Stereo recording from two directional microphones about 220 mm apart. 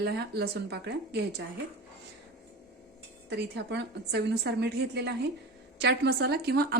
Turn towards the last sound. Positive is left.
turn(degrees=-45)  # may be behind; listen again after turning